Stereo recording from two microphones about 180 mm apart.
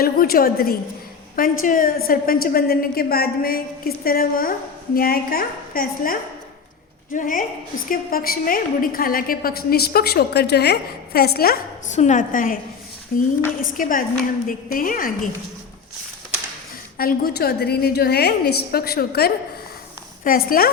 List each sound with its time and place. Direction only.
0.0 s a woman's voice: 55° left (ahead or behind)
11.9 s a woman's voice: 40° left (ahead or behind)
17.0 s a woman's voice: 55° left (ahead or behind)